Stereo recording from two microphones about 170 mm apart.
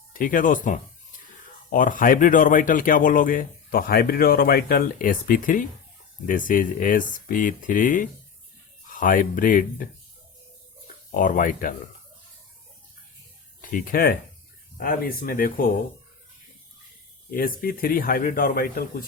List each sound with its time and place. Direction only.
0.1 s speech: 50° left (ahead or behind)
11.1 s speech: 50° left (ahead or behind)
13.6 s speech: 55° left (ahead or behind)
17.3 s speech: 55° left (ahead or behind)